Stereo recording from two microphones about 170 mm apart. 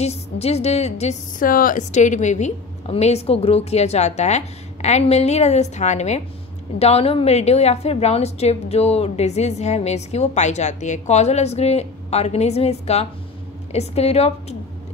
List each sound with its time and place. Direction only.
0.0 s a woman's voice: 40° left (ahead or behind)
1.5 s a woman's voice: 55° left (ahead or behind); by 14.3 s 40° left (ahead or behind)